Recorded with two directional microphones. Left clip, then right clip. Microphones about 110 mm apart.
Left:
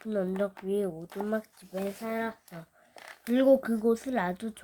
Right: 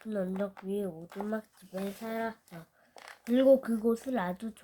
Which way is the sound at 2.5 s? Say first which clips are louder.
Left 3 dB; 15° left (ahead or behind).